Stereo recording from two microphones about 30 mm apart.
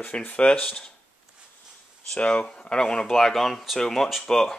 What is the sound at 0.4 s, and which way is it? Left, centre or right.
Speech, left.